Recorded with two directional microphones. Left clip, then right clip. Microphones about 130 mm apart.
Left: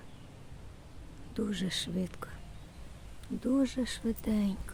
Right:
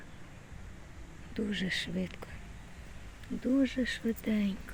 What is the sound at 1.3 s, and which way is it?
Speech, 40° left (ahead or behind).